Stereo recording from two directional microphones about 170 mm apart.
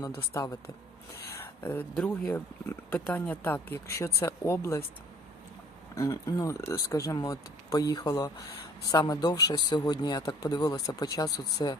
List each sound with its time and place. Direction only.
0.3 s speech: 20° left (ahead or behind)
1.3 s a sound: 15° left (ahead or behind)
2.0 s speech: 5° left (ahead or behind)
5.9 s speech: 20° left (ahead or behind)